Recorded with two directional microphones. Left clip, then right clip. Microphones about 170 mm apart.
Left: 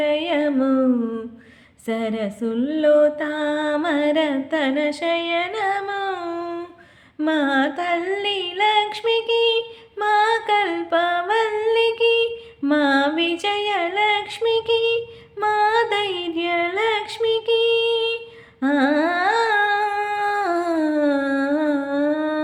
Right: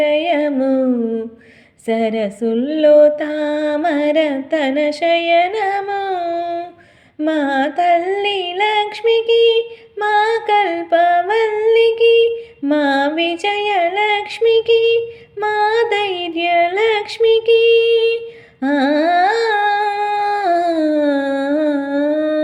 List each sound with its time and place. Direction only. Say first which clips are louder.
0.0 s music: right 5 dB; 10° right (ahead or behind)
1.9 s a sound: right 7 dB; 10° right (ahead or behind)
18.6 s humming: right 4 dB; 15° right (ahead or behind)